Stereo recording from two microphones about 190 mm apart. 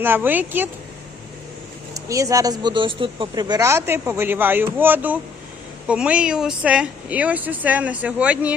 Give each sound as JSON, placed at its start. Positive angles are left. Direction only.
{"t": 0.0, "sound": "speech", "side_deg": -10}
{"t": 1.9, "sound": "speech", "side_deg": -15}